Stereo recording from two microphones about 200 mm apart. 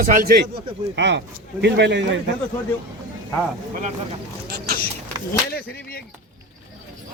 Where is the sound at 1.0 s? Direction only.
60° right (ahead or behind).